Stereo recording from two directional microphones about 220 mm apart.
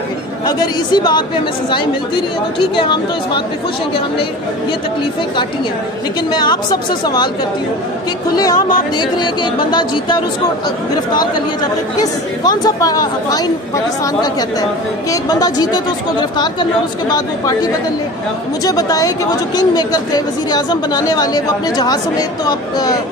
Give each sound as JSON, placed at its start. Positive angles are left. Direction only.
{"t": 0.5, "sound": "speech", "side_deg": 20}
{"t": 2.7, "sound": "speech", "side_deg": 20}
{"t": 6.3, "sound": "speech", "side_deg": 20}
{"t": 9.2, "sound": "speech", "side_deg": 20}
{"t": 12.4, "sound": "a woman's voice", "side_deg": 20}
{"t": 18.7, "sound": "a woman's voice", "side_deg": 15}
{"t": 22.5, "sound": "a woman's voice", "side_deg": 15}